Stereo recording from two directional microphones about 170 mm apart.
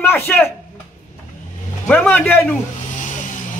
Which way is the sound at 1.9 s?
10° left (ahead or behind).